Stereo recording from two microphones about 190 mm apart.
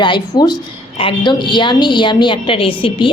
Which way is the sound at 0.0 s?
25° left (ahead or behind).